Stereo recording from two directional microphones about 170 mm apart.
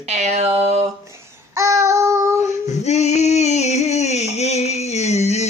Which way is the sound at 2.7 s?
40° left (ahead or behind).